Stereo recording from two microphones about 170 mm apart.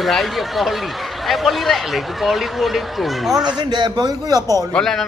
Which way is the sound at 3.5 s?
25° right (ahead or behind).